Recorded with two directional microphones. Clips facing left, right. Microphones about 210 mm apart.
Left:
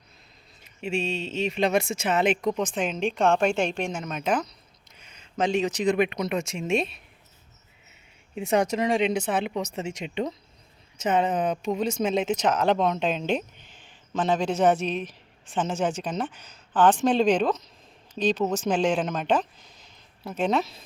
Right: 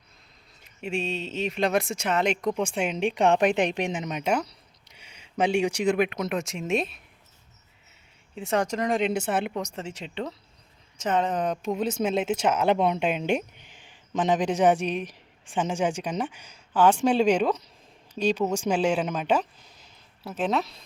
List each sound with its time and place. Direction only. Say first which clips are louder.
0.8 s speech: left 1 dB; centre (ahead or behind)
8.4 s speech: left 3 dB; 10° left (ahead or behind)